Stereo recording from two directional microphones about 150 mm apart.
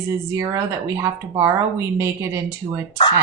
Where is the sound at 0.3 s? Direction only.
20° right (ahead or behind).